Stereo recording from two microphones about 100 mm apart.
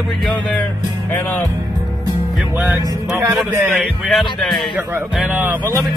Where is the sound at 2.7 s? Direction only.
25° right (ahead or behind).